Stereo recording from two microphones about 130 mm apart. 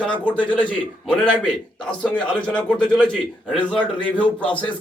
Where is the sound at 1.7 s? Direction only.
5° left (ahead or behind).